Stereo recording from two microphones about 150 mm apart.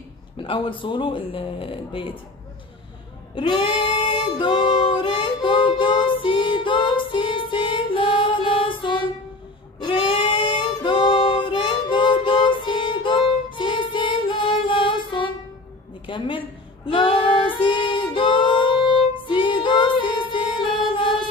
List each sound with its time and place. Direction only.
0.4 s speech: 35° left (ahead or behind)
3.3 s music: 30° left (ahead or behind)
9.8 s singing: 30° left (ahead or behind)
16.1 s child singing: 35° left (ahead or behind)
19.1 s music: 35° left (ahead or behind)